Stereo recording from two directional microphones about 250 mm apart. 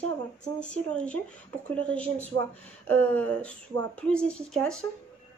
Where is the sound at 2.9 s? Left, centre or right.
Right.